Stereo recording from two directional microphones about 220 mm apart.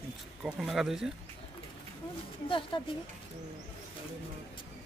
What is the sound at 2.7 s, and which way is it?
Speech, 20° left (ahead or behind).